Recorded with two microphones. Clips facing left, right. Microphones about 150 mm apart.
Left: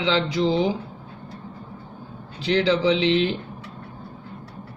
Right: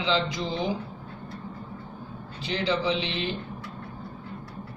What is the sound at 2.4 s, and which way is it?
Speech, 90° left.